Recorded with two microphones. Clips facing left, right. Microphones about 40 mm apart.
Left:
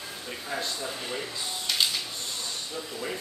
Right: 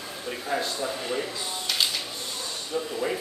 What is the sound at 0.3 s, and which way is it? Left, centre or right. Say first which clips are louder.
Speech: right 5 dB; centre.